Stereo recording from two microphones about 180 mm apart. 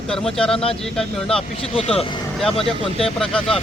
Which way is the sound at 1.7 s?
35° left (ahead or behind).